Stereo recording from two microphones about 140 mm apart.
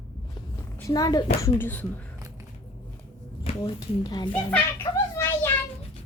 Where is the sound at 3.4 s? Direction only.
30° left (ahead or behind).